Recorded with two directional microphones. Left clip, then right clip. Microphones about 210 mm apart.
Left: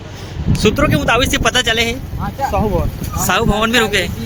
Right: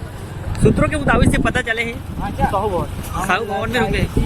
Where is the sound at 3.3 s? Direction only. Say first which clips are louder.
Left 5 dB; 30° left (ahead or behind).